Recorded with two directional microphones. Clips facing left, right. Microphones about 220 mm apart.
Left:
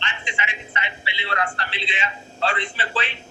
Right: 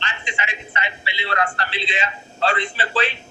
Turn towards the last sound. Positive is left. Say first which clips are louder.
# right 5 dB
turn(degrees=-40)  # may be behind; listen again after turning